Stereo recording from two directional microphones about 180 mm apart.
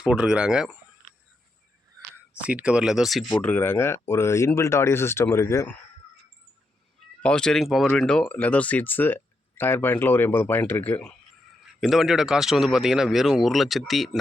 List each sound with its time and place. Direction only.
0.0 s a man's voice: 5° right (ahead or behind)
2.4 s a man's voice: 5° right (ahead or behind); by 5.8 s 15° left (ahead or behind)
7.2 s a man's voice: 5° left (ahead or behind)